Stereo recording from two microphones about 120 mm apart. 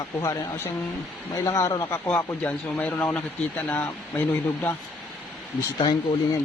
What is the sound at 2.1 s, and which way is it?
Speech, 10° left (ahead or behind).